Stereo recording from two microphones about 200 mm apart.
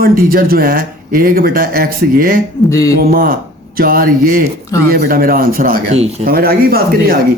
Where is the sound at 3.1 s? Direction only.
45° right (ahead or behind).